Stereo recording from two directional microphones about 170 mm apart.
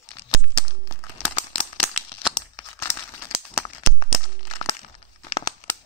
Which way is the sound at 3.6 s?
30° left (ahead or behind).